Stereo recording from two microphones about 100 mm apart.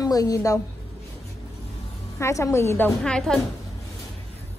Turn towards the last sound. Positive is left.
turn(degrees=5)  # may be behind; listen again after turning